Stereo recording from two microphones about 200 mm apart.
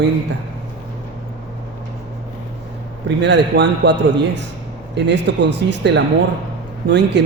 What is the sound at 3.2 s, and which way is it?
Speech, 60° right (ahead or behind).